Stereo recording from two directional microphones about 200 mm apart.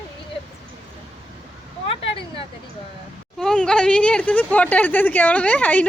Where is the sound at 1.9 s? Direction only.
25° left (ahead or behind).